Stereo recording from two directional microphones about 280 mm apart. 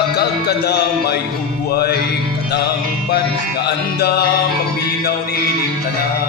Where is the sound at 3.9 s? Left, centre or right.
Left.